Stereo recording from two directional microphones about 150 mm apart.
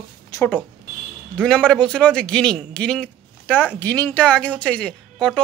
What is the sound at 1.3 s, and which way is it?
Speech, 5° left (ahead or behind).